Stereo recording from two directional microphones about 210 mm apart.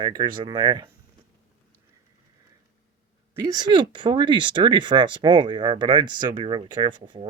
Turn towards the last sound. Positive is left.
turn(degrees=-25)  # may be behind; listen again after turning